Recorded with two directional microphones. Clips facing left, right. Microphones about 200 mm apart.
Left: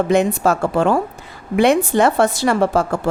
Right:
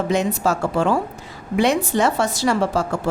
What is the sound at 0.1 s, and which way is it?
A woman's voice, 55° left (ahead or behind).